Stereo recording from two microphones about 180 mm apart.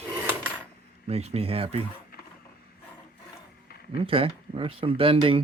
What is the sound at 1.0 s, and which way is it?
Speech, 35° right (ahead or behind).